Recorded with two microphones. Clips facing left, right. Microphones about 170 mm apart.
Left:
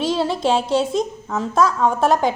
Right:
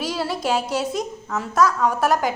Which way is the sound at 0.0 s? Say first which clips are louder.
Left 5 dB; 25° left (ahead or behind).